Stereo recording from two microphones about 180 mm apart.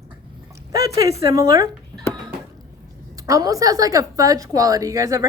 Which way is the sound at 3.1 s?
20° right (ahead or behind).